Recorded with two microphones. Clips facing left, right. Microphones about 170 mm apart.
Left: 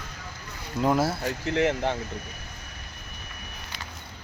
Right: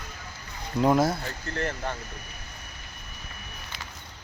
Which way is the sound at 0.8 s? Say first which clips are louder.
Right 2 dB; centre (ahead or behind).